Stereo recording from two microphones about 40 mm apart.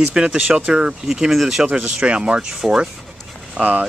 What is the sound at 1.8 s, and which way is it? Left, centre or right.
Speech, right.